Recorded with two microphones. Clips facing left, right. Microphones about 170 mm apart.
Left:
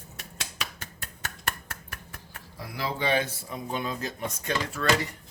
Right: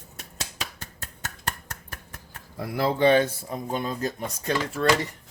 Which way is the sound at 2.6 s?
50° right (ahead or behind).